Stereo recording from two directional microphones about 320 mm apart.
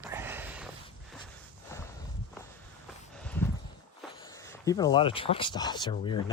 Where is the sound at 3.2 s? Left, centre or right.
Centre.